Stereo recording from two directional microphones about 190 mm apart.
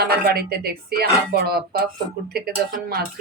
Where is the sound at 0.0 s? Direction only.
55° right (ahead or behind).